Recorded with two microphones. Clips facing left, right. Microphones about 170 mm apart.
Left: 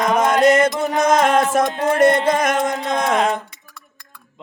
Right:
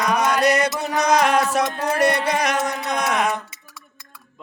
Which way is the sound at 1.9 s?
50° left (ahead or behind).